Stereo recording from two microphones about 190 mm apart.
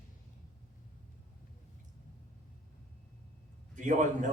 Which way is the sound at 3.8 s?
40° right (ahead or behind).